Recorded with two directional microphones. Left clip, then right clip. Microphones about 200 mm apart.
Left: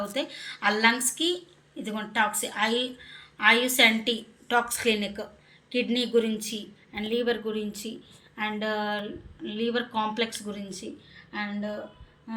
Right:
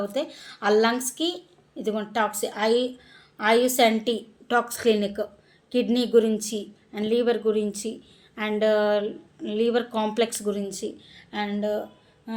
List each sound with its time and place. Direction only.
0.1 s a woman's voice: 50° right (ahead or behind)